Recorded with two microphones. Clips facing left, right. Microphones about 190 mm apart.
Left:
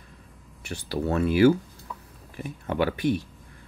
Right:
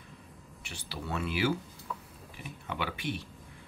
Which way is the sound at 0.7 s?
45° left (ahead or behind).